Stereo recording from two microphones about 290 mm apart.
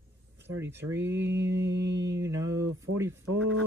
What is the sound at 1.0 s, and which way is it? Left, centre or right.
Mantra, right.